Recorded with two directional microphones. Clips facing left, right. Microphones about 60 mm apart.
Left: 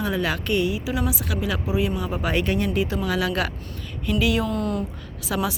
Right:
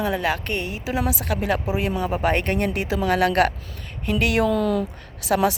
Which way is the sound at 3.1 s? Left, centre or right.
Right.